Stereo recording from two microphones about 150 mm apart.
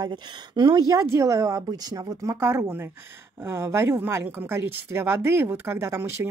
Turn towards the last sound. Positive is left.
turn(degrees=-20)  # may be behind; listen again after turning